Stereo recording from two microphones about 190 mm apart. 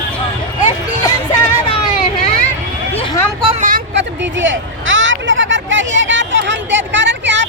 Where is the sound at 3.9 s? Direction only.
70° right (ahead or behind).